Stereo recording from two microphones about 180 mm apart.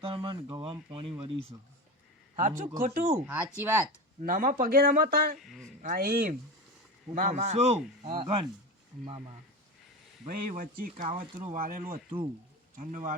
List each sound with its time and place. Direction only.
0.0 s speech: 30° right (ahead or behind)
2.3 s speech: 45° right (ahead or behind)
3.2 s speech: 10° right (ahead or behind)
4.2 s speech: 50° right (ahead or behind)
5.4 s a man's voice: centre (ahead or behind)
5.8 s speech: 55° right (ahead or behind)
7.1 s a man's voice: 45° right (ahead or behind)
10.2 s speech: 50° right (ahead or behind)